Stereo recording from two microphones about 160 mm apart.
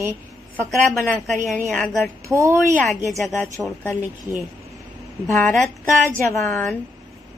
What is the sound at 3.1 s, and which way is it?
Speech, centre (ahead or behind).